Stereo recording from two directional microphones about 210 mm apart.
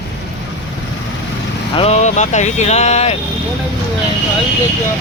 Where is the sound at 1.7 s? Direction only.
30° left (ahead or behind).